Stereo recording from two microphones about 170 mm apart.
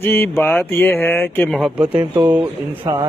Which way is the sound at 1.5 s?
5° right (ahead or behind).